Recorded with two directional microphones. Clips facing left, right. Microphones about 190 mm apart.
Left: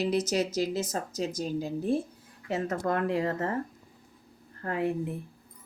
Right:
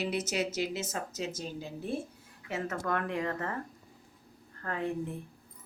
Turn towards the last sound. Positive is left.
turn(degrees=15)  # may be behind; listen again after turning